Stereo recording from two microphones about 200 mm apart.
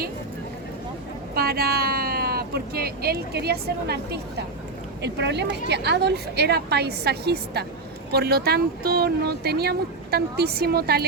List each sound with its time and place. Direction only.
1.4 s a woman's voice: 50° right (ahead or behind)